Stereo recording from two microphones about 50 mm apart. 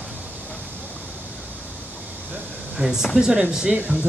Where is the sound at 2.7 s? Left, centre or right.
Centre.